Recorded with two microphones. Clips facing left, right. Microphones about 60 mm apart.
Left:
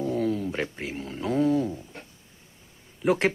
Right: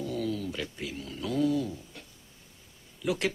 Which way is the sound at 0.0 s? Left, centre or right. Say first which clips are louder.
Left 6 dB; left.